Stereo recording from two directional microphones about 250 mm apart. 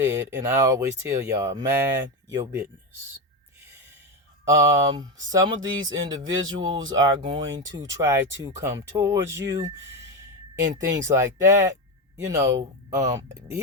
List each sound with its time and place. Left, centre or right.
0.0 s speech: centre
4.4 s speech: centre
11.0 s speech: centre